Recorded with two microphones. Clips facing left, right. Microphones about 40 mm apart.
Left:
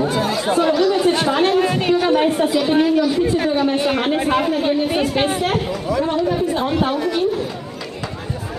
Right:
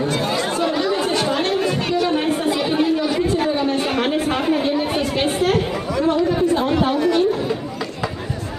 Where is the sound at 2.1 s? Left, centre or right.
Centre.